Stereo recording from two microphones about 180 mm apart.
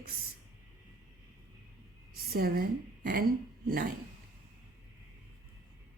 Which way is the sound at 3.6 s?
55° right (ahead or behind).